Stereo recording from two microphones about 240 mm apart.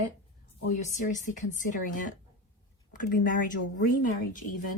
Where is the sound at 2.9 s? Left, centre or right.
Left.